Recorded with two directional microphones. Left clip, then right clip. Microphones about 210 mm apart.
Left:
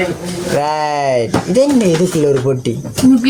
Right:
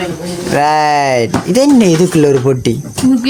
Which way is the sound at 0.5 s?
30° right (ahead or behind).